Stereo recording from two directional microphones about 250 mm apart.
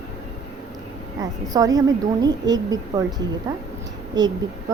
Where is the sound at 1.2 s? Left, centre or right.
Centre.